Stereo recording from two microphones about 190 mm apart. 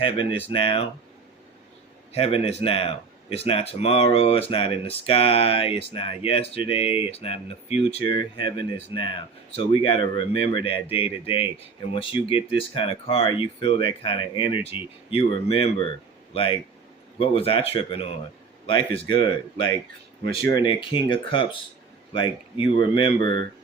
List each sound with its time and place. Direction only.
0.0 s speech: 25° left (ahead or behind)
2.1 s speech: 30° left (ahead or behind)